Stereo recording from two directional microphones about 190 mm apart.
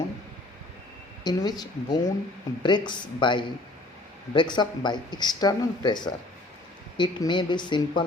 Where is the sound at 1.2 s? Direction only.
20° left (ahead or behind).